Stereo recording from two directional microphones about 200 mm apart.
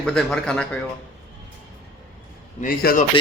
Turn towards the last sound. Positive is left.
turn(degrees=45)  # may be behind; listen again after turning